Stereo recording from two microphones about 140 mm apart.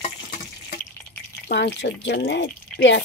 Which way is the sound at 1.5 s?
90° left.